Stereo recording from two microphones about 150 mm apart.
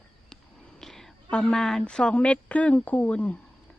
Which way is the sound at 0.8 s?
5° left (ahead or behind).